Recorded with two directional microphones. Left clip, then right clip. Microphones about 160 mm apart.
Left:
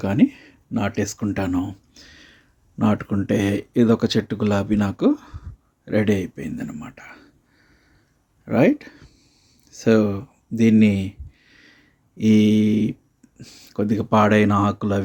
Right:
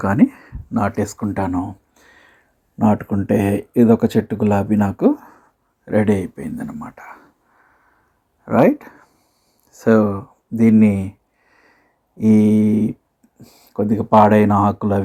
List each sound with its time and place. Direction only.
0.0 s a sound: 25° left (ahead or behind)
3.1 s speech: 15° left (ahead or behind)
4.9 s speech: 5° left (ahead or behind)
5.8 s speech: 20° left (ahead or behind)
8.4 s speech: 30° left (ahead or behind)
9.8 s a sound: 35° left (ahead or behind)
13.7 s speech: 35° left (ahead or behind)